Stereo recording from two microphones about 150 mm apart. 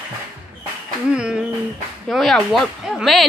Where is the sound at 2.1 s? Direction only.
Centre (ahead or behind).